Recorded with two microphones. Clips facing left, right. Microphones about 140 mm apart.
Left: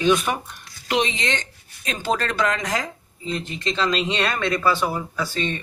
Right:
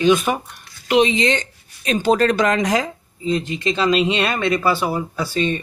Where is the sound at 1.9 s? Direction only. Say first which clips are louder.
Right 8 dB; 20° right (ahead or behind).